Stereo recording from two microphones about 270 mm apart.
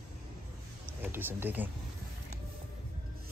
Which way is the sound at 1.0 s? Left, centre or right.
Centre.